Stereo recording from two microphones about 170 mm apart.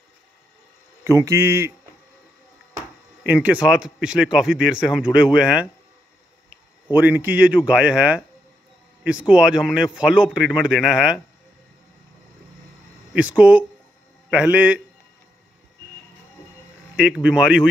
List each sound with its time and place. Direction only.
1.0 s a man's voice: 15° right (ahead or behind)
3.3 s speech: 10° right (ahead or behind)
6.9 s a man's voice: 10° right (ahead or behind)
13.1 s a man's voice: 5° right (ahead or behind)
16.9 s speech: 5° right (ahead or behind)